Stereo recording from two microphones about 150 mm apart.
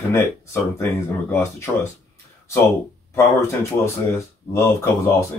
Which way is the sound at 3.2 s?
20° left (ahead or behind).